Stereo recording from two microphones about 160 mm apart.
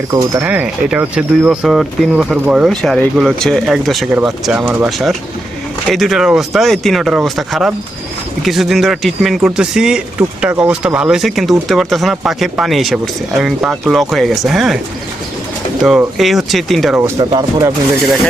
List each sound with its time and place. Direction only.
0.1 s speech: 20° right (ahead or behind)
0.4 s speech: 10° right (ahead or behind)
15.8 s speech: 5° right (ahead or behind)
17.0 s speech: 20° right (ahead or behind)